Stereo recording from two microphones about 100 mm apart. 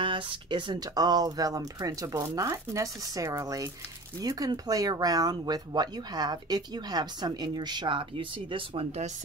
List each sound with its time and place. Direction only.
0.0 s speech: 55° right (ahead or behind)